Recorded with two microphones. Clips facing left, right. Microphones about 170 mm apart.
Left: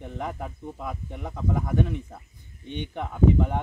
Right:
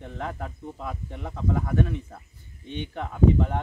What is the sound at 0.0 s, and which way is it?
Speech, 10° left (ahead or behind).